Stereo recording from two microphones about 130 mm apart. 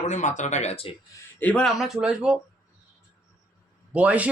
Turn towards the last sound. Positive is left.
turn(degrees=-10)  # may be behind; listen again after turning